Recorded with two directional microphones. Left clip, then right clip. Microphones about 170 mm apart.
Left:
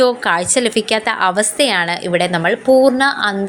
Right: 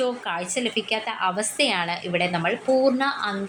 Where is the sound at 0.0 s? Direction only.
40° left (ahead or behind).